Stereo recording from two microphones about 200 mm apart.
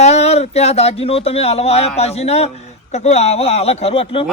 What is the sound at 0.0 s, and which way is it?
Speech, 30° left (ahead or behind).